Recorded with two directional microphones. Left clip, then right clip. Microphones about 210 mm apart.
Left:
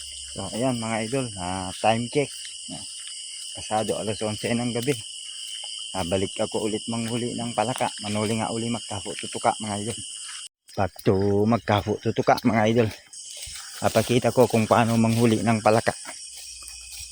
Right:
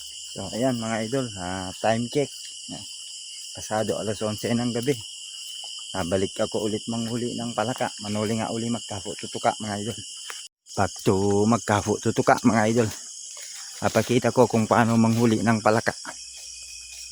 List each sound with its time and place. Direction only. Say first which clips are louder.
0.3 s speech: right 1 dB; 15° right (ahead or behind)
3.7 s speech: even; 20° right (ahead or behind)
11.9 s speech: right 3 dB; 25° right (ahead or behind)
12.5 s speech: left 1 dB; 10° right (ahead or behind)